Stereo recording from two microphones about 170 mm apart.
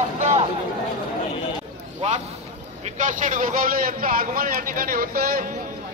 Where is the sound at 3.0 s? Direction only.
50° right (ahead or behind).